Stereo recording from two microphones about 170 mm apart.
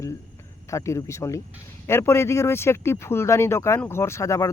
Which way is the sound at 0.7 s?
15° left (ahead or behind).